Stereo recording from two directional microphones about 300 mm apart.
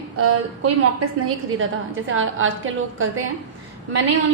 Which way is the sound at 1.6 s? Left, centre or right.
Right.